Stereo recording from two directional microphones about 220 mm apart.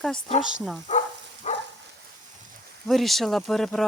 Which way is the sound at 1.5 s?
30° left (ahead or behind).